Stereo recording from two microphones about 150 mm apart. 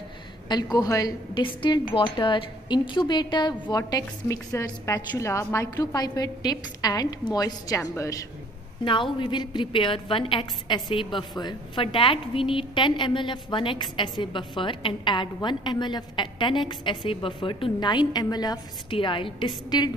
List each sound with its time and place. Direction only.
0.5 s a woman's voice: 25° left (ahead or behind)